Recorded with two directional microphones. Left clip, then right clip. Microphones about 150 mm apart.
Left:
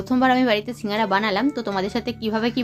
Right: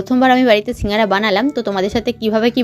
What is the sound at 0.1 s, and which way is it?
A woman's voice, 30° right (ahead or behind).